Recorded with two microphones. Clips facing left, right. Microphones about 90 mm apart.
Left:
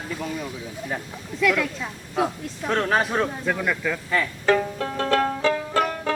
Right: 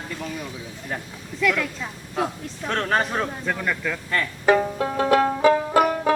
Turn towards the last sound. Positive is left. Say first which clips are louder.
# right 4 dB
turn(degrees=-15)  # may be behind; listen again after turning